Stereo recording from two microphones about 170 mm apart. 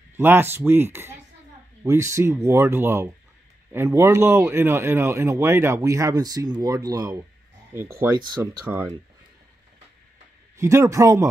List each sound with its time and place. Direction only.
0.2 s speech: 10° right (ahead or behind)
10.6 s speech: 15° right (ahead or behind)